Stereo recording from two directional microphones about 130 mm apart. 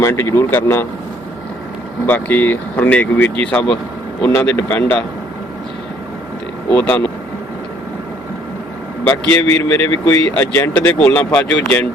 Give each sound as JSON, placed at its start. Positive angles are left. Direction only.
{"t": 0.0, "sound": "speech", "side_deg": 20}
{"t": 2.0, "sound": "speech", "side_deg": 15}
{"t": 6.7, "sound": "speech", "side_deg": 15}
{"t": 9.0, "sound": "speech", "side_deg": 15}